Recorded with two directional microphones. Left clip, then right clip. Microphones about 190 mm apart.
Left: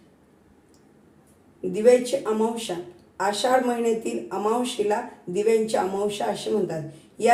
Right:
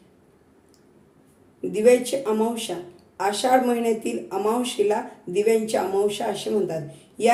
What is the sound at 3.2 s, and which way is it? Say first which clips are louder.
Speech: right 1 dB; 20° right (ahead or behind).